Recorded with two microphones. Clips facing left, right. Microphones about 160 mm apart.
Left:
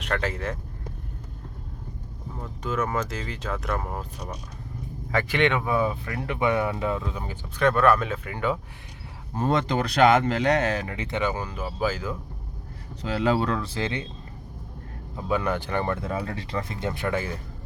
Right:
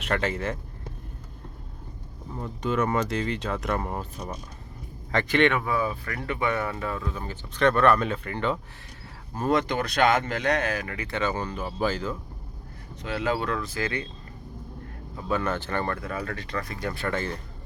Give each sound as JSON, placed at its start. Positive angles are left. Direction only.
{"t": 0.0, "sound": "speech", "side_deg": 0}
{"t": 2.4, "sound": "speech", "side_deg": 0}
{"t": 5.1, "sound": "speech", "side_deg": 15}
{"t": 9.3, "sound": "speech", "side_deg": 25}
{"t": 13.0, "sound": "speech", "side_deg": 35}
{"t": 15.1, "sound": "speech", "side_deg": 15}
{"t": 16.0, "sound": "speech", "side_deg": 25}